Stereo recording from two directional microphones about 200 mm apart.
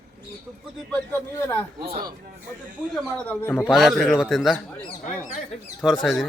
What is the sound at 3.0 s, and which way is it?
A man's voice, 5° left (ahead or behind).